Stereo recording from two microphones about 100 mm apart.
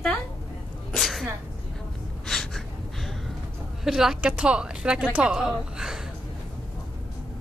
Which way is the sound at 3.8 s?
5° right (ahead or behind).